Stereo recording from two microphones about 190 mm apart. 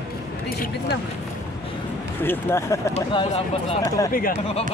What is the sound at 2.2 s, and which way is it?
Speech, 10° left (ahead or behind).